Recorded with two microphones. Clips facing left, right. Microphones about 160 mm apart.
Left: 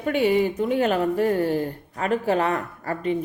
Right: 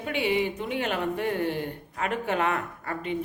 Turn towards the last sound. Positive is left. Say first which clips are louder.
# left 6 dB
turn(degrees=40)  # may be behind; listen again after turning